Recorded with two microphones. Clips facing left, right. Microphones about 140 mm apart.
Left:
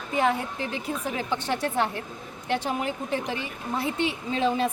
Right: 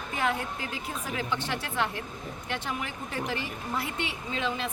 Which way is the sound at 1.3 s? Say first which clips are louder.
Left 7 dB; 40° left (ahead or behind).